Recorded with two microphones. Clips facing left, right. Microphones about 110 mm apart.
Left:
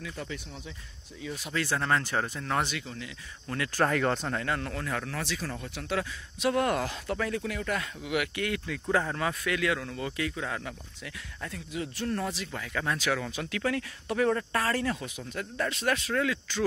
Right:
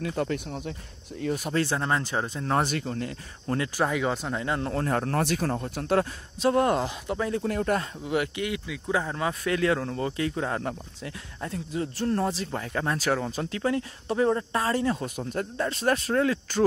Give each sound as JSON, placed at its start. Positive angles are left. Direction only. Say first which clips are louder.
{"t": 0.0, "sound": "speech", "louder": "right 10 dB", "side_deg": -55}
{"t": 1.5, "sound": "speech", "louder": "even", "side_deg": -30}
{"t": 3.7, "sound": "speech", "louder": "left 2 dB", "side_deg": -10}
{"t": 4.4, "sound": "speech", "louder": "right 4 dB", "side_deg": -25}
{"t": 4.8, "sound": "speech", "louder": "right 8 dB", "side_deg": -40}
{"t": 6.5, "sound": "speech", "louder": "right 4 dB", "side_deg": -25}
{"t": 7.4, "sound": "speech", "louder": "right 6 dB", "side_deg": -40}
{"t": 8.4, "sound": "speech", "louder": "right 1 dB", "side_deg": -15}
{"t": 9.3, "sound": "speech", "louder": "right 4 dB", "side_deg": -35}
{"t": 15.0, "sound": "speech", "louder": "right 6 dB", "side_deg": -40}